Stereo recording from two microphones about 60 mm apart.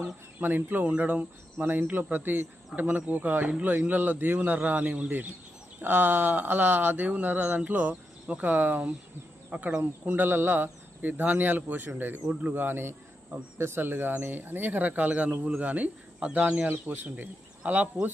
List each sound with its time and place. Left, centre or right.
0.0 s speech: right
5.8 s speech: right
10.1 s speech: right
12.3 s speech: right
12.5 s speech: right